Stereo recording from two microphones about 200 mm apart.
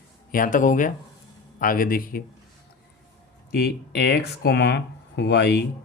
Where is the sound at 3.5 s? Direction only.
55° left (ahead or behind).